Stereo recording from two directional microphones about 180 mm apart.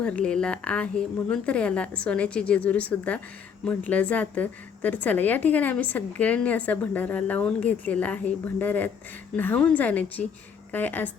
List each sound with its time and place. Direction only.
0.0 s a woman's voice: 5° left (ahead or behind)